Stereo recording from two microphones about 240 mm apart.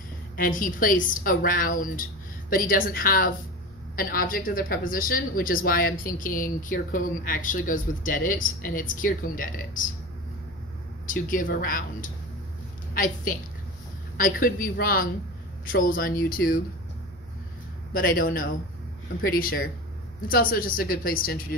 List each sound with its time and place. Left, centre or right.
0.4 s speech: left
11.1 s speech: left
17.9 s speech: left
20.2 s speech: left